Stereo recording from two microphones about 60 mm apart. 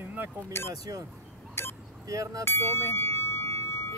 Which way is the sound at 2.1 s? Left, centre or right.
Right.